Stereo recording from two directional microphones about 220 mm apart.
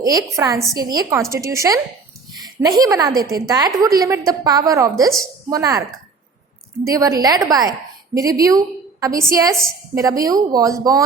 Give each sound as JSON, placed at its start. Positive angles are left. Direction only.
{"t": 0.0, "sound": "a woman's voice", "side_deg": -15}
{"t": 6.8, "sound": "a woman's voice", "side_deg": -15}